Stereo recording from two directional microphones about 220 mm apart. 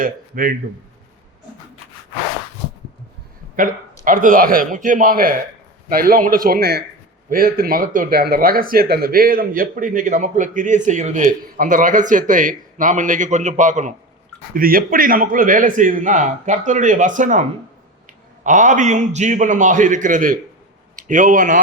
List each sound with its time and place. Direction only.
0.0 s speech: 40° right (ahead or behind)
3.5 s speech: 35° right (ahead or behind)
18.4 s a man's voice: 35° right (ahead or behind)